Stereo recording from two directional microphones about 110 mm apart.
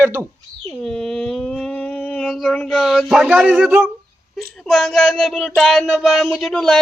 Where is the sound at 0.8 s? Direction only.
5° left (ahead or behind).